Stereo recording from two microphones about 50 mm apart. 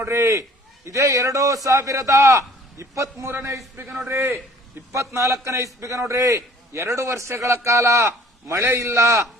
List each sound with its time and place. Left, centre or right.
0.0 s a man's voice: right
4.1 s a man's voice: right
4.9 s a man's voice: right